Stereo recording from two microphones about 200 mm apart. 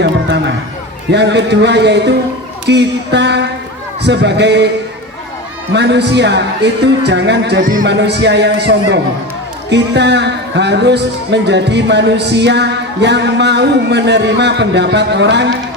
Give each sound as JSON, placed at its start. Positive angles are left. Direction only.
{"t": 0.0, "sound": "a sound", "side_deg": -60}
{"t": 1.1, "sound": "speech", "side_deg": -60}
{"t": 5.7, "sound": "speech", "side_deg": -60}